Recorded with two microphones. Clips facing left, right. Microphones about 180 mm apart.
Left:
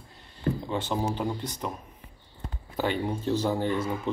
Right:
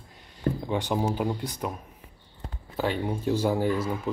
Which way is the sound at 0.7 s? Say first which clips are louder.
Right 2 dB; 15° right (ahead or behind).